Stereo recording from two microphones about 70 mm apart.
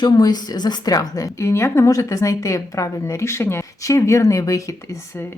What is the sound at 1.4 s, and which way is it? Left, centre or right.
A woman's voice, left.